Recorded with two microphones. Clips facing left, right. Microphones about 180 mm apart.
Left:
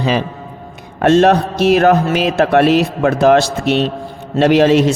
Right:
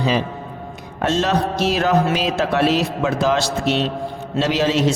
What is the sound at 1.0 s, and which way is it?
A man's voice, 60° left (ahead or behind).